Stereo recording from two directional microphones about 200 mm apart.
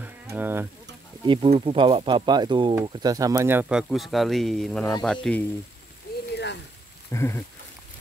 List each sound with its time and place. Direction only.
0.0 s a sound: 10° right (ahead or behind)
1.2 s speech: 25° right (ahead or behind); by 5.4 s 5° left (ahead or behind)
6.3 s rain on surface: 60° left (ahead or behind)
7.1 s speech: 15° left (ahead or behind)